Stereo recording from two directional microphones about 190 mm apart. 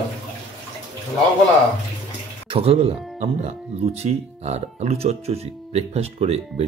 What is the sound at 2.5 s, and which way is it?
Speech, 30° right (ahead or behind).